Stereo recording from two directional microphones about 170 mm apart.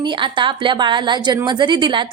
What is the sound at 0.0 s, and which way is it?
A woman's voice, 30° right (ahead or behind).